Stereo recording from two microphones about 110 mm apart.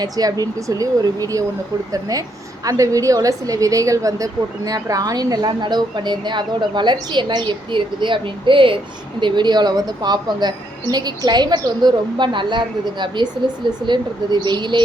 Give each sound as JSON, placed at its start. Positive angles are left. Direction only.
{"t": 0.0, "sound": "a woman's voice", "side_deg": -35}